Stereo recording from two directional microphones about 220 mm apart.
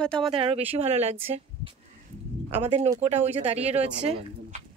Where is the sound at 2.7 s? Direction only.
25° right (ahead or behind).